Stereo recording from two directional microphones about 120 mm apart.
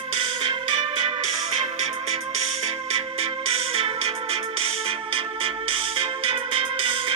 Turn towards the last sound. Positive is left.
turn(degrees=-50)  # may be behind; listen again after turning